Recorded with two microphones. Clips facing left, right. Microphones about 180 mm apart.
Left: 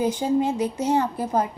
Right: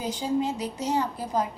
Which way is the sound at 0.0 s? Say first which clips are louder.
Left 5 dB; 55° left (ahead or behind).